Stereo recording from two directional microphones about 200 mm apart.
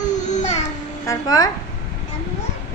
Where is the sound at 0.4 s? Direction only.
35° left (ahead or behind).